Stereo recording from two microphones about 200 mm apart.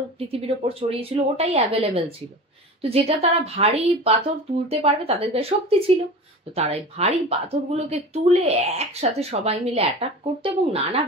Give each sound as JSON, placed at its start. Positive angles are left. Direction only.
{"t": 0.2, "sound": "speech", "side_deg": -30}